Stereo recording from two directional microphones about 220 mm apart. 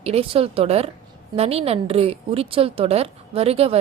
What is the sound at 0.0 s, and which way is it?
Speech, 25° right (ahead or behind).